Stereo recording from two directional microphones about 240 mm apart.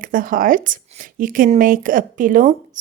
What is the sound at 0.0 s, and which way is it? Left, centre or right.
Speech, right.